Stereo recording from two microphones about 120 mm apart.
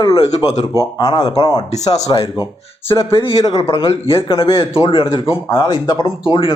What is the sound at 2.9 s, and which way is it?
Speech, 20° left (ahead or behind).